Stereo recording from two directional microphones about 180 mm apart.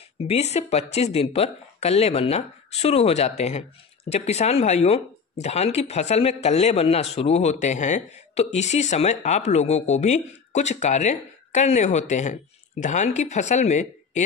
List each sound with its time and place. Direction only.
0.2 s speech: 35° left (ahead or behind)